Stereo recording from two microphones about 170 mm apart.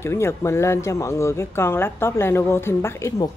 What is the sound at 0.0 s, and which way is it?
Speech, 15° left (ahead or behind).